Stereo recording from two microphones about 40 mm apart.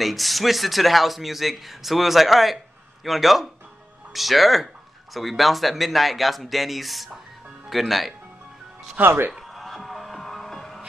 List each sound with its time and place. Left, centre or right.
0.0 s speech: centre
9.0 s speech: right
9.5 s music: centre